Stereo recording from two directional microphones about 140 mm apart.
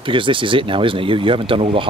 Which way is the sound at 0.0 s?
35° right (ahead or behind).